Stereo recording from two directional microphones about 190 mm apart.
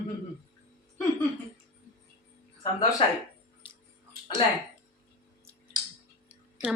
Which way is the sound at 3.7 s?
25° left (ahead or behind).